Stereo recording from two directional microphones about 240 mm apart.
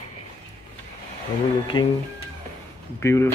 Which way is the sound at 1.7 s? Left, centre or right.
Centre.